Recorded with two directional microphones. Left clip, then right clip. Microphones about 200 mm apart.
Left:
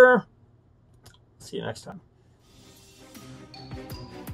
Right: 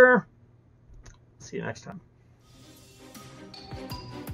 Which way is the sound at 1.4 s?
10° right (ahead or behind).